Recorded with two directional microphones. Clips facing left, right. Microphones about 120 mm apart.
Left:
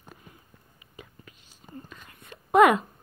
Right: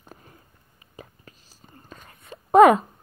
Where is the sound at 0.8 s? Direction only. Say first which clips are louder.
Right 3 dB; 35° right (ahead or behind).